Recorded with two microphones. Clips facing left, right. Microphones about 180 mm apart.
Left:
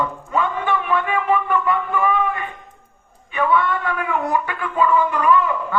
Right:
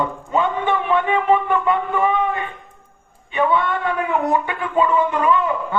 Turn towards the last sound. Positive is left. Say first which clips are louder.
# even
turn(degrees=-25)  # may be behind; listen again after turning